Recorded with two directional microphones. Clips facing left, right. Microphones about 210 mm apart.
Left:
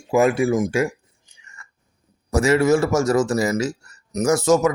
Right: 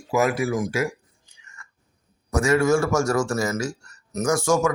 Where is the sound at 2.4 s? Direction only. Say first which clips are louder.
Left 3 dB; 20° left (ahead or behind).